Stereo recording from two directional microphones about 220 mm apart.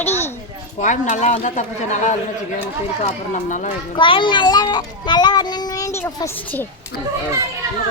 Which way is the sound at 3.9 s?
20° left (ahead or behind).